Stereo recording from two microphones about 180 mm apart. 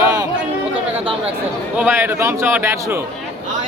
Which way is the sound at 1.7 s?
10° right (ahead or behind).